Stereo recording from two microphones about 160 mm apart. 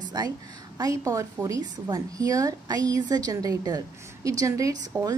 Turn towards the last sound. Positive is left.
turn(degrees=-20)  # may be behind; listen again after turning